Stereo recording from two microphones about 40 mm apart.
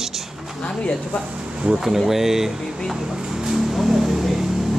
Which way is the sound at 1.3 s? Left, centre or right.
Right.